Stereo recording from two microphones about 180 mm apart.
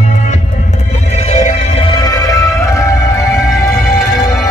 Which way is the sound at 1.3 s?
40° left (ahead or behind).